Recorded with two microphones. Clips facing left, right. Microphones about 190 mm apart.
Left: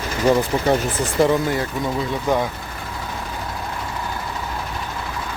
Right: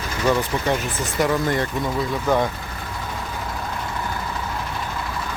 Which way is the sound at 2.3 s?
15° left (ahead or behind).